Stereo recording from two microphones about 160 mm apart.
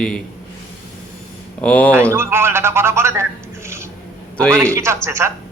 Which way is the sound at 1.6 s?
10° left (ahead or behind).